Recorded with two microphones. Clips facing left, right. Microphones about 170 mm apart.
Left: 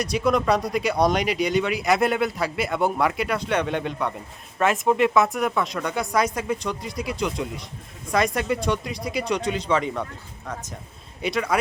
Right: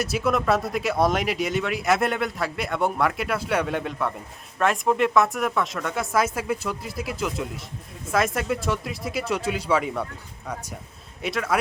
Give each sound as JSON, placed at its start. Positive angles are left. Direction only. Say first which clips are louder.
{"t": 0.0, "sound": "speech", "louder": "left 2 dB", "side_deg": -5}